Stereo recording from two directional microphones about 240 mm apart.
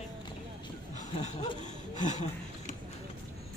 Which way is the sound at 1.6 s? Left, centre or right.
Left.